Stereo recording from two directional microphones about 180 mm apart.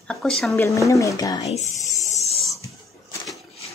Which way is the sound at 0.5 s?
15° left (ahead or behind).